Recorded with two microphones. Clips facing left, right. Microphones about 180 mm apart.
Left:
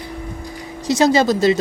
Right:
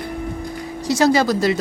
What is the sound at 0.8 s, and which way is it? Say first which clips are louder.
Speech: left 1 dB; 20° left (ahead or behind).